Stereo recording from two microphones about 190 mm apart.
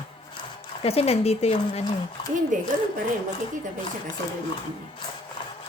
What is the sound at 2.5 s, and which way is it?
Speech, 45° right (ahead or behind).